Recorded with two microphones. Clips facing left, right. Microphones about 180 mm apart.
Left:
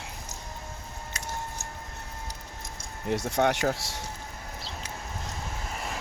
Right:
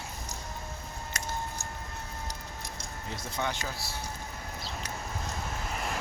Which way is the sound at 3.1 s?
75° left (ahead or behind).